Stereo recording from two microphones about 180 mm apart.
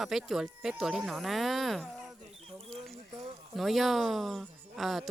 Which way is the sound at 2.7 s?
5° left (ahead or behind).